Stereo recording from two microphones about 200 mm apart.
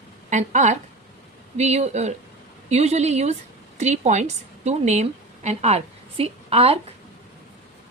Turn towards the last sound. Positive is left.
turn(degrees=-30)  # may be behind; listen again after turning